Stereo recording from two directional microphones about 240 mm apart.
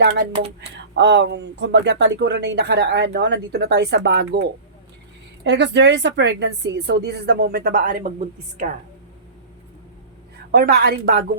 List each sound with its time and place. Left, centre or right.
0.9 s speech: right
5.4 s speech: right
10.5 s a woman's voice: right